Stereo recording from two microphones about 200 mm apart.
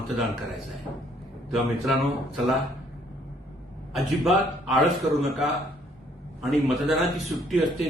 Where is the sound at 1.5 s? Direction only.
Centre (ahead or behind).